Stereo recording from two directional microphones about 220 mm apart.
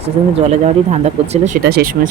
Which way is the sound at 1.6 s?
45° right (ahead or behind).